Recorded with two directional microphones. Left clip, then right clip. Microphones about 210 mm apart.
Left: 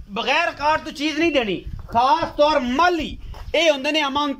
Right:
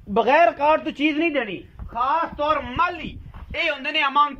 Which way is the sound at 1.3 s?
10° left (ahead or behind).